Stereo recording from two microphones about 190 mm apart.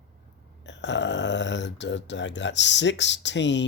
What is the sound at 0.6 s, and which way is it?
Speech, 70° left (ahead or behind).